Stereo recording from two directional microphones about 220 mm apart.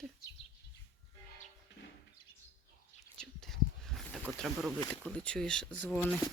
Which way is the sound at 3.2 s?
Centre (ahead or behind).